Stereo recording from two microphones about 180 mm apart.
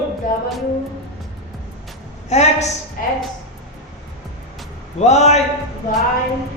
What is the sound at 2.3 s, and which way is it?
Speech, 40° left (ahead or behind).